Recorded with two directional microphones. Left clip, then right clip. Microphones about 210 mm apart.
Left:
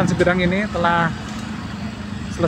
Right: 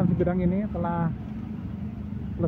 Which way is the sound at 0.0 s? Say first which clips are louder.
Left 9 dB; 10° left (ahead or behind).